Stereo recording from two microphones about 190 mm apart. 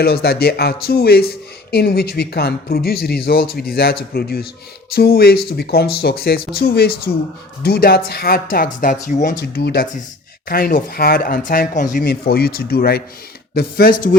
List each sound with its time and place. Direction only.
0.0 s speech: 55° left (ahead or behind)
9.4 s speech: 55° left (ahead or behind)